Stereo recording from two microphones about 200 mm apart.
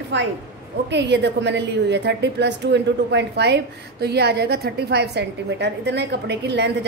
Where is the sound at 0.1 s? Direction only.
60° right (ahead or behind).